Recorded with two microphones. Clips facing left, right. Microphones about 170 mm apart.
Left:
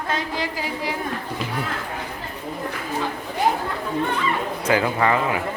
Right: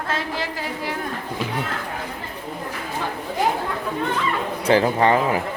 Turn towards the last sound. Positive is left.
turn(degrees=-30)  # may be behind; listen again after turning